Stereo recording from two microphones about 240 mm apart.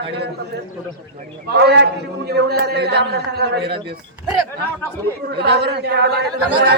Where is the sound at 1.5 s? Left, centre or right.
Right.